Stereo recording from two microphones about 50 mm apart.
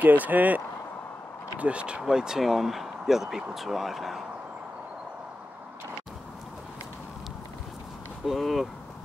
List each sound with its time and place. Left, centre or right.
0.0 s speech: right
1.6 s speech: right; by 4.2 s centre
8.3 s speech: centre